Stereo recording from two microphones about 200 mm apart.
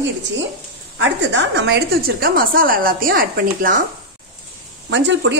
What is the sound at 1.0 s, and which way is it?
A woman's voice, 65° right (ahead or behind).